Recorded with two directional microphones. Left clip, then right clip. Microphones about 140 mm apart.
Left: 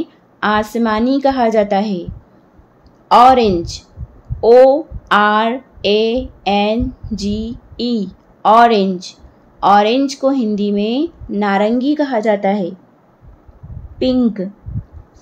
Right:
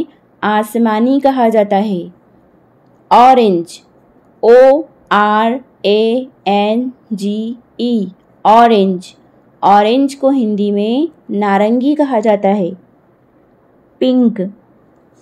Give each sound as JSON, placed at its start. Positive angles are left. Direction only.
{"t": 0.0, "sound": "a woman's voice", "side_deg": -15}